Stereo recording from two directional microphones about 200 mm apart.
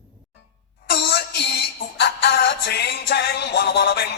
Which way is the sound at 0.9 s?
55° left (ahead or behind).